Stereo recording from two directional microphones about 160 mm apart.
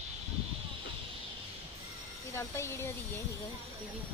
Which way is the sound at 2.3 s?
15° left (ahead or behind).